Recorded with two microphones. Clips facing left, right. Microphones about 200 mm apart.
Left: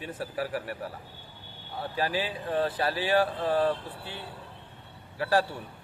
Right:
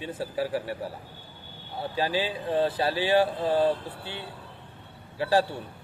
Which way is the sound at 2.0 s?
25° right (ahead or behind).